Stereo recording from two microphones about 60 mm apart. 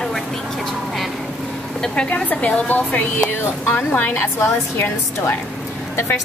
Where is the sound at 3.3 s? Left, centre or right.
Left.